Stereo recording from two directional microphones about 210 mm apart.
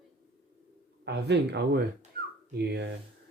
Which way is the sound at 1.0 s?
55° right (ahead or behind).